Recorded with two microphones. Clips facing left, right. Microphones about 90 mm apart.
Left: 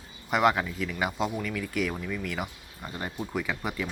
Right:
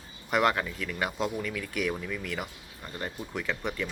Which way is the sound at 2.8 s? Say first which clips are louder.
Left 2 dB; 15° left (ahead or behind).